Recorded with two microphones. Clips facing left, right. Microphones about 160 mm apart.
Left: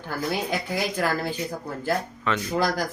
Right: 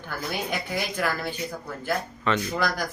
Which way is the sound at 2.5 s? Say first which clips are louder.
Left 3 dB; 35° left (ahead or behind).